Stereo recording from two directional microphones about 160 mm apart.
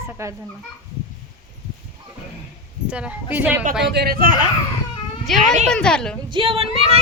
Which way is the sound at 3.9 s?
75° right (ahead or behind).